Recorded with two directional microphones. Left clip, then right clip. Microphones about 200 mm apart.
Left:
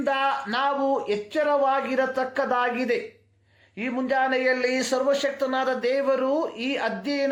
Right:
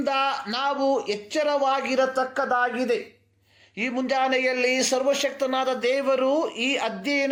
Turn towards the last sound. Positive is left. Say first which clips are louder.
# right 1 dB
turn(degrees=-20)  # may be behind; listen again after turning